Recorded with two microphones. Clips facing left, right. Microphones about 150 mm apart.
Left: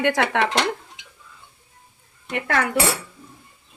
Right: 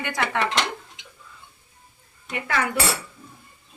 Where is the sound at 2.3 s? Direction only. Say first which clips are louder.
Left 3 dB; 55° left (ahead or behind).